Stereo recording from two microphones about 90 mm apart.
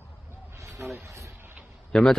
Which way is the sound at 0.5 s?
30° right (ahead or behind).